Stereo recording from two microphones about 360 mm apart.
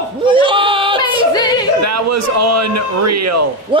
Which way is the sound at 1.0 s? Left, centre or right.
Centre.